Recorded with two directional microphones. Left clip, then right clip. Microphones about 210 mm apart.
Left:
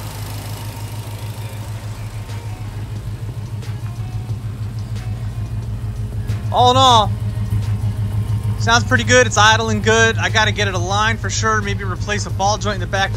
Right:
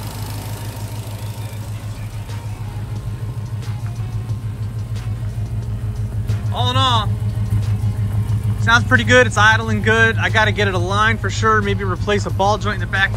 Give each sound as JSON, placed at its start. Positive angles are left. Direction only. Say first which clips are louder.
{"t": 6.5, "sound": "music", "louder": "left 7 dB", "side_deg": 20}
{"t": 8.5, "sound": "speech", "louder": "right 1 dB", "side_deg": 5}